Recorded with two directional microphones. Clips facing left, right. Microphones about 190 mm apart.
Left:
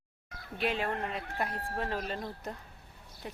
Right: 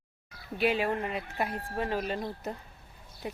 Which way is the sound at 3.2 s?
10° right (ahead or behind).